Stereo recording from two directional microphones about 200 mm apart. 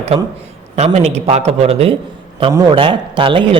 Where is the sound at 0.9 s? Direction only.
30° right (ahead or behind).